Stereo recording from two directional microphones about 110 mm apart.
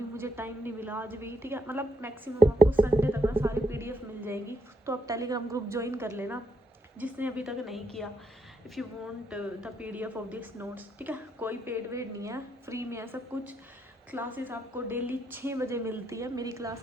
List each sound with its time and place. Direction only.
0.2 s a woman's voice: 20° right (ahead or behind)